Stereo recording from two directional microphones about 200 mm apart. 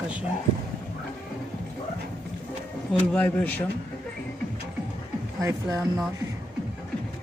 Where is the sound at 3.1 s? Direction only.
5° left (ahead or behind).